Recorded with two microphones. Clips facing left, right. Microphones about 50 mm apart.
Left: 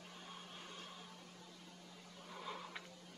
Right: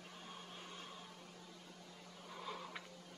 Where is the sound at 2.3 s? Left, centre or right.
Centre.